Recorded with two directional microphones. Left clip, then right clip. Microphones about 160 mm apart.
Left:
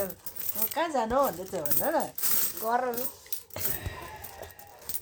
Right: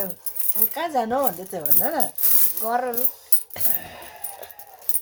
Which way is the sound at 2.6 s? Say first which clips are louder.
Right 4 dB; 15° right (ahead or behind).